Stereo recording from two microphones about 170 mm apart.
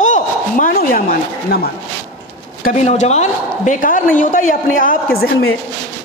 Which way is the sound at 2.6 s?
45° left (ahead or behind).